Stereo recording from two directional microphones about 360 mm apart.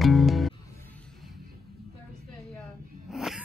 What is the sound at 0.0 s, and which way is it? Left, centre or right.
Music, centre.